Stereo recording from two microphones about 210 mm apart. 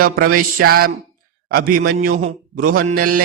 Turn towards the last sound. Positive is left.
turn(degrees=-45)  # may be behind; listen again after turning